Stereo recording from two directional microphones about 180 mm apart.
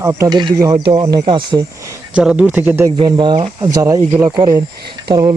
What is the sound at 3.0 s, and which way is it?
Speech, 25° right (ahead or behind).